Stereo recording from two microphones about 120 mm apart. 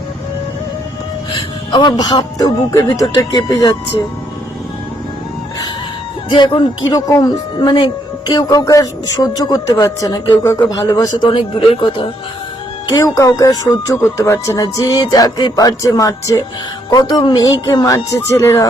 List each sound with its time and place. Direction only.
1.7 s speech: 35° left (ahead or behind)
6.3 s speech: 40° left (ahead or behind)
11.3 s speech: 45° left (ahead or behind)
12.9 s speech: 30° left (ahead or behind)